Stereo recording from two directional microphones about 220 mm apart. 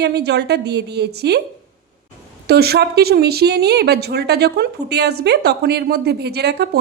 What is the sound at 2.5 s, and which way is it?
A woman's voice, 45° right (ahead or behind).